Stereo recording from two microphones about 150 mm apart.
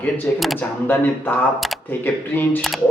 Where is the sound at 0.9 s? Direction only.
15° left (ahead or behind).